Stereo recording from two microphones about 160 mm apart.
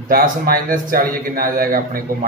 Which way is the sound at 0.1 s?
65° right (ahead or behind).